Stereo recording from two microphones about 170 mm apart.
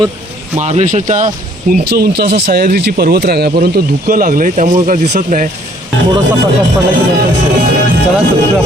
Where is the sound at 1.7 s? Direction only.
70° right (ahead or behind); by 5.5 s 50° right (ahead or behind).